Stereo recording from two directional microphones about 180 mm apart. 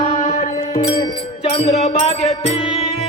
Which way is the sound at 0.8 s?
25° left (ahead or behind).